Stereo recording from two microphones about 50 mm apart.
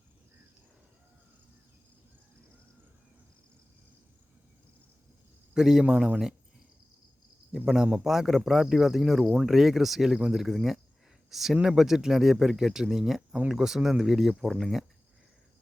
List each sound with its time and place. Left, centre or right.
5.5 s speech: centre
7.5 s speech: centre
14.3 s speech: centre
14.6 s speech: centre